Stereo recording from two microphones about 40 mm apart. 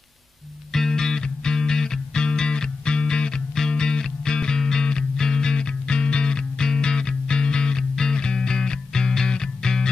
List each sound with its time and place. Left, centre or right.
0.7 s music: centre